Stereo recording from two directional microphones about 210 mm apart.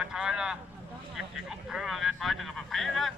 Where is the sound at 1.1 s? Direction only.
5° right (ahead or behind).